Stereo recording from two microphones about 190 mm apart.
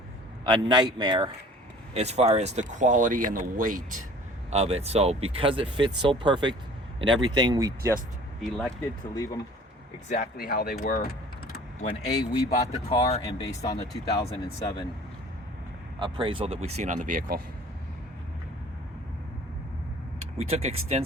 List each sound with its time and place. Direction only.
0.4 s speech: 25° right (ahead or behind); by 4.0 s 45° right (ahead or behind)
4.5 s speech: 35° right (ahead or behind); by 7.9 s 15° right (ahead or behind)
8.4 s speech: 5° left (ahead or behind)
10.1 s speech: 45° left (ahead or behind)
11.8 s speech: 30° left (ahead or behind)
16.0 s speech: 25° right (ahead or behind); by 17.4 s 50° right (ahead or behind)
20.1 s speech: 30° right (ahead or behind)